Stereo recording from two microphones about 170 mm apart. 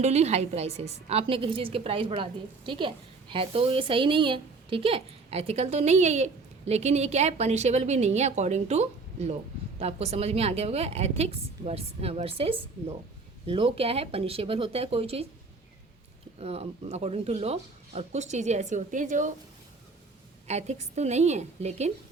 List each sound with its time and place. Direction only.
0.0 s a woman's voice: 40° right (ahead or behind)
16.4 s a woman's voice: 35° right (ahead or behind)
20.5 s a woman's voice: 40° right (ahead or behind)